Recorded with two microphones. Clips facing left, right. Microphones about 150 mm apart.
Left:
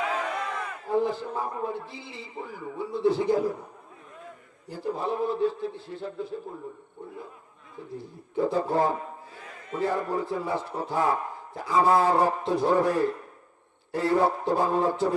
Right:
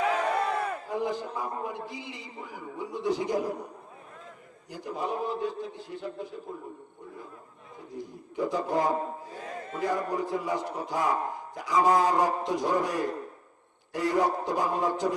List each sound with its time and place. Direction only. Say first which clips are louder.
0.3 s battle cry: right 5 dB; 35° right (ahead or behind)
0.9 s a man's voice: left 6 dB; 15° right (ahead or behind)
4.7 s a man's voice: left 3 dB; 15° right (ahead or behind)
7.9 s a man's voice: left 3 dB; 15° right (ahead or behind)
9.3 s a sound: right 7 dB; 40° right (ahead or behind)
9.8 s a man's voice: left 2 dB; 15° right (ahead or behind)